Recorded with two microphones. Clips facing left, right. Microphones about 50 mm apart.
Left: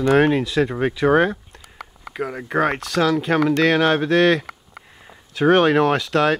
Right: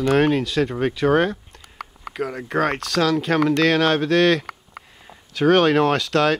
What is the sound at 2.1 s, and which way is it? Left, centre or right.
Speech, centre.